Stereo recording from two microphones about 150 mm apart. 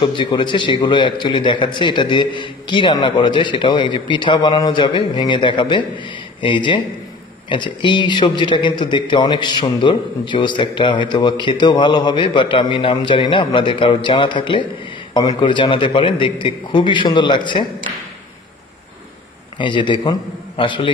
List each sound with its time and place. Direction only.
0.0 s speech: 30° left (ahead or behind)
19.6 s speech: 30° left (ahead or behind)